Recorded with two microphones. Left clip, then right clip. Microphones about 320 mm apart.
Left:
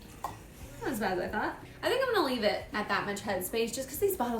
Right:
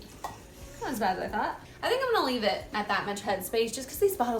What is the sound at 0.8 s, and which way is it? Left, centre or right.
A woman's voice, centre.